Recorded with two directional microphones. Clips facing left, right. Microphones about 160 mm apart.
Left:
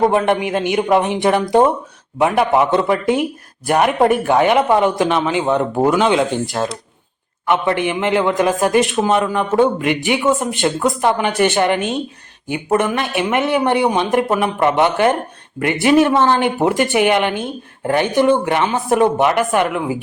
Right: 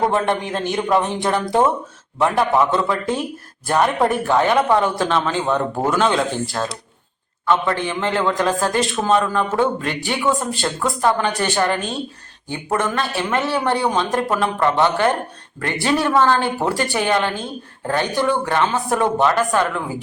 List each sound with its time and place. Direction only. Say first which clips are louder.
0.0 s a man's voice: left 4 dB; 15° left (ahead or behind)